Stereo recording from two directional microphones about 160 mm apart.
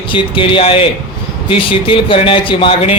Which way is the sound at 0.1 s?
30° left (ahead or behind).